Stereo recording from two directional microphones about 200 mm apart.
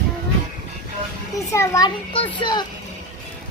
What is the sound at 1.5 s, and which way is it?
A child's voice, 15° left (ahead or behind).